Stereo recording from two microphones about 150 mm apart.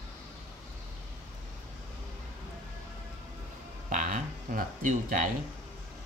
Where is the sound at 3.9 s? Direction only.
60° right (ahead or behind).